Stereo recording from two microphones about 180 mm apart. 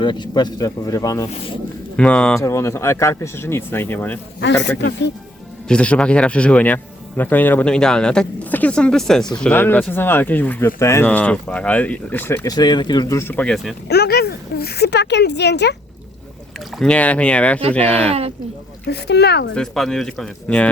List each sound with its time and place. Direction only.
0.0 s speech: 25° left (ahead or behind)
2.0 s speech: 5° left (ahead or behind)
2.4 s speech: 15° left (ahead or behind)
4.8 s speech: 70° left (ahead or behind)
5.6 s speech: 5° left (ahead or behind)
13.8 s a woman's voice: 60° left (ahead or behind)
16.7 s speech: 5° left (ahead or behind)
18.9 s speech: 65° left (ahead or behind)
19.5 s speech: centre (ahead or behind)